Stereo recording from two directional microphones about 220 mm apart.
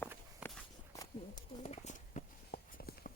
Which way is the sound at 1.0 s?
20° left (ahead or behind).